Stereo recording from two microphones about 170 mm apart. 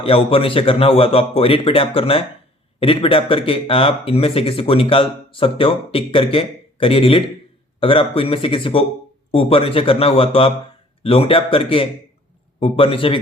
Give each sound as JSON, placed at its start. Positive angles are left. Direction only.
{"t": 0.0, "sound": "speech", "side_deg": 35}